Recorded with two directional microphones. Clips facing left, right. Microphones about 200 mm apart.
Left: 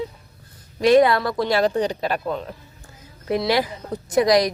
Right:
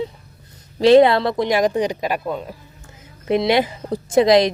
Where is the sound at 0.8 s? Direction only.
25° right (ahead or behind); by 2.6 s 10° right (ahead or behind).